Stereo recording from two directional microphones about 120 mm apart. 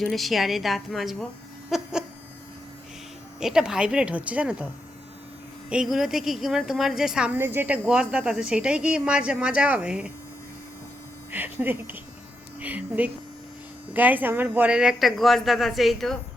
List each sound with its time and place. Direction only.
0.0 s a woman's voice: centre (ahead or behind)
1.7 s a sound: 5° right (ahead or behind)
3.4 s a woman's voice: 5° right (ahead or behind)
7.3 s a woman's voice: 20° right (ahead or behind)
11.3 s a woman's voice: 15° right (ahead or behind); by 16.1 s centre (ahead or behind)